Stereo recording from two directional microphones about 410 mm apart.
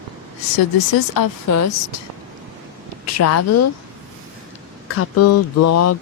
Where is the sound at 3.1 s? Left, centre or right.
Left.